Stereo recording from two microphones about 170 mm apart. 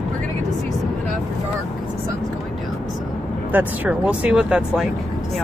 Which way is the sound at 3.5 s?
10° right (ahead or behind).